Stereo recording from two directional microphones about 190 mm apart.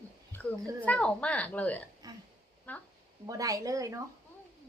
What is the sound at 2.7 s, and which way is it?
Speech, 5° left (ahead or behind).